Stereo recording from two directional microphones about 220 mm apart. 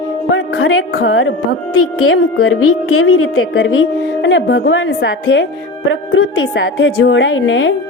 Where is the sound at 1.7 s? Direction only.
80° left.